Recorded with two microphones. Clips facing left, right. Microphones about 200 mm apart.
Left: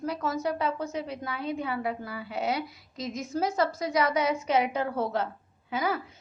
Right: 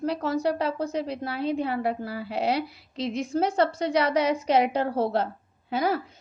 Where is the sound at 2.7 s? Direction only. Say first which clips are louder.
Right 6 dB; 70° right (ahead or behind).